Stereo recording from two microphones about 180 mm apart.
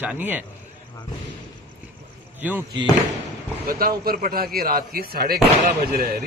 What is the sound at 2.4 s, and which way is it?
Speech, 10° right (ahead or behind).